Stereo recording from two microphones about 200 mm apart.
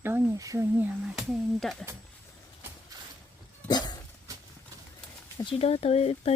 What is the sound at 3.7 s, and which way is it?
Dog, 20° left (ahead or behind).